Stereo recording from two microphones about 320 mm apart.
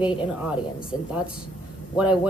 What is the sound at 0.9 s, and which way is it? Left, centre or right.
Speech, centre.